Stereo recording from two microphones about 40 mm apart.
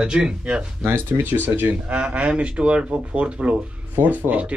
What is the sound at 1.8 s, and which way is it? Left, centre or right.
A man's voice, right.